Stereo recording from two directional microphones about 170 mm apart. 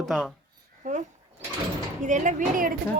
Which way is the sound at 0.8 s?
45° right (ahead or behind).